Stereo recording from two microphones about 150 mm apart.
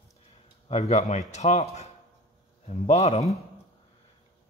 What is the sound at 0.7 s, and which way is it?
Speech, 50° left (ahead or behind).